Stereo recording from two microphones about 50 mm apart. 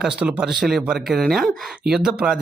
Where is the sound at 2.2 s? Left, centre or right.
Right.